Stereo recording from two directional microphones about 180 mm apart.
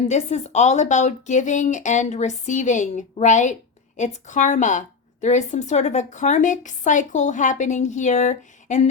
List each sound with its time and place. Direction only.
0.1 s a woman's voice: 40° left (ahead or behind)